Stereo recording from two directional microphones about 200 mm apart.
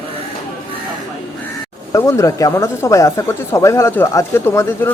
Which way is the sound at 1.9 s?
15° left (ahead or behind).